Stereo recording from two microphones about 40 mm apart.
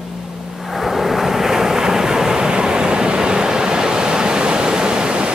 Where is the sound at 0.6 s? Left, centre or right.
Centre.